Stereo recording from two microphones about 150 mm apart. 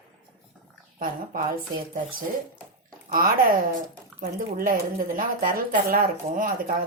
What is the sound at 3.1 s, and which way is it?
A woman's voice, 65° right (ahead or behind).